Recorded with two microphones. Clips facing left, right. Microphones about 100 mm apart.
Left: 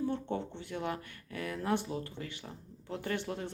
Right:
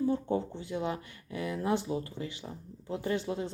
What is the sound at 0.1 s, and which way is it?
Speech, 10° right (ahead or behind).